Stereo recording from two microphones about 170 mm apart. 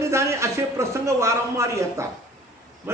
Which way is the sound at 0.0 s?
15° right (ahead or behind).